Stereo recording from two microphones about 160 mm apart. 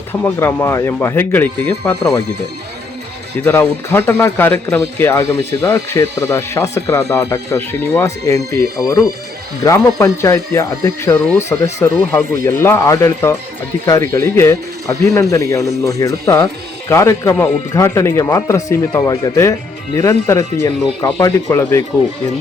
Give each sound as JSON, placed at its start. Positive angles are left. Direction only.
{"t": 0.1, "sound": "speech", "side_deg": 15}
{"t": 3.4, "sound": "a man's voice", "side_deg": 10}